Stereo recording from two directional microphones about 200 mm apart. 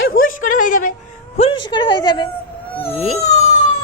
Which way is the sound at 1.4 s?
25° left (ahead or behind).